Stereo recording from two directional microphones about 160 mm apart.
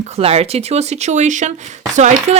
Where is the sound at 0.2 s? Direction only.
40° right (ahead or behind).